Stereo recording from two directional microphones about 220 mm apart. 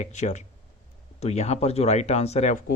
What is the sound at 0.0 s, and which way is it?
Speech, 30° left (ahead or behind).